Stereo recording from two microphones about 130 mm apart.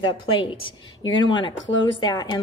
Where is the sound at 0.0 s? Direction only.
40° left (ahead or behind).